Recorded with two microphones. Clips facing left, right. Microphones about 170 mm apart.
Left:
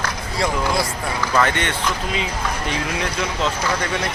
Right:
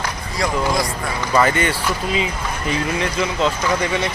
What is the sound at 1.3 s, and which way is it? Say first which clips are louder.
Speech: right 4 dB; 5° right (ahead or behind).